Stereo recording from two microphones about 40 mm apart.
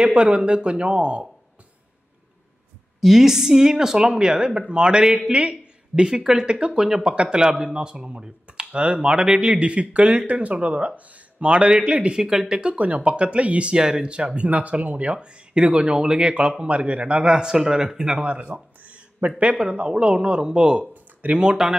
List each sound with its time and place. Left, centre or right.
0.0 s speech: right
3.0 s speech: centre; by 12.1 s right
12.1 s speech: centre
12.7 s speech: right
13.7 s speech: centre
17.3 s speech: centre
18.2 s a sound: right
19.5 s speech: centre
20.9 s a sound: right
21.4 s speech: right